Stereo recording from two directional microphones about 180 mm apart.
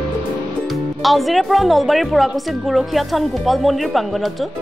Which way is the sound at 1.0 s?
Centre (ahead or behind).